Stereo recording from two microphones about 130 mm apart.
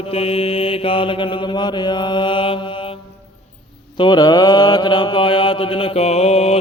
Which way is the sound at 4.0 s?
35° left (ahead or behind).